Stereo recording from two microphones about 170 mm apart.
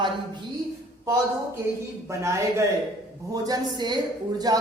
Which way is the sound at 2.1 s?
15° right (ahead or behind).